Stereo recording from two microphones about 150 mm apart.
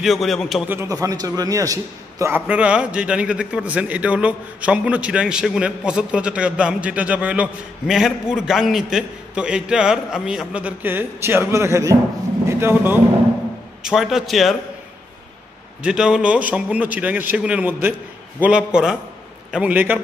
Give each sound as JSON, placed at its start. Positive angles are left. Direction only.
{"t": 0.0, "sound": "a man's voice", "side_deg": 0}
{"t": 0.7, "sound": "a man's voice", "side_deg": -15}
{"t": 13.8, "sound": "a man's voice", "side_deg": 0}
{"t": 15.8, "sound": "a man's voice", "side_deg": -5}